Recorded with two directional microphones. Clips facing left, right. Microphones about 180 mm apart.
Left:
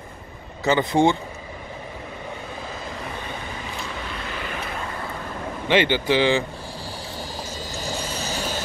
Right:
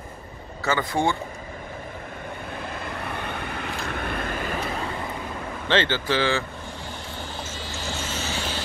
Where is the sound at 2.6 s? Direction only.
60° right (ahead or behind).